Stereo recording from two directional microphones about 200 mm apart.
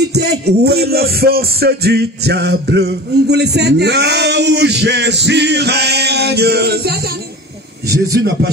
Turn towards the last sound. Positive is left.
turn(degrees=-55)  # may be behind; listen again after turning